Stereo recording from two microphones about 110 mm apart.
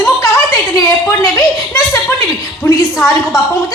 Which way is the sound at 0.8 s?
30° left (ahead or behind).